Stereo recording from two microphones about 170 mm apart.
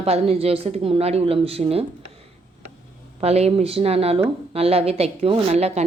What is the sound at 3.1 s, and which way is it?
A woman's voice, 35° right (ahead or behind).